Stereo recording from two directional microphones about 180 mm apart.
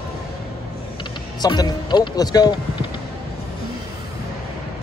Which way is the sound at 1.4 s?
20° left (ahead or behind).